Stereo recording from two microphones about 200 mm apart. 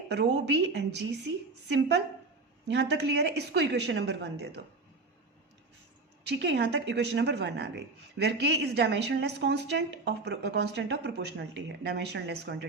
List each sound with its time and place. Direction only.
0.1 s a woman's voice: 60° right (ahead or behind)
2.6 s a woman's voice: 60° right (ahead or behind)
6.2 s a woman's voice: 60° right (ahead or behind)